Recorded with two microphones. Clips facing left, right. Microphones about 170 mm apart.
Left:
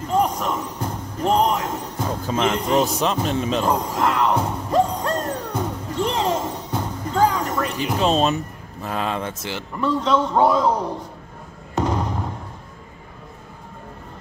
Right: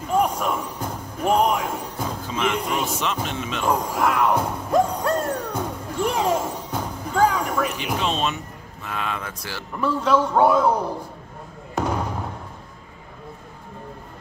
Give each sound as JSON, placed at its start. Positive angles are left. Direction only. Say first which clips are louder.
{"t": 0.0, "sound": "basketball bounce", "louder": "left 1 dB", "side_deg": -10}
{"t": 2.5, "sound": "speech", "louder": "left 5 dB", "side_deg": -10}
{"t": 3.0, "sound": "speech", "louder": "left 5 dB", "side_deg": 35}
{"t": 3.6, "sound": "speech", "louder": "left 1 dB", "side_deg": -10}
{"t": 4.6, "sound": "music", "louder": "even", "side_deg": -10}
{"t": 8.0, "sound": "speech", "louder": "left 8 dB", "side_deg": 40}
{"t": 9.8, "sound": "speech", "louder": "even", "side_deg": -10}
{"t": 11.7, "sound": "a sound", "louder": "left 2 dB", "side_deg": -10}